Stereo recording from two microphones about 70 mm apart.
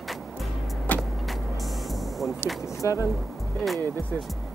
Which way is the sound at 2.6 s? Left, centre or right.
Left.